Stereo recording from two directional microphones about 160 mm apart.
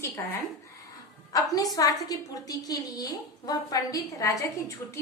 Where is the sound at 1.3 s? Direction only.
20° left (ahead or behind).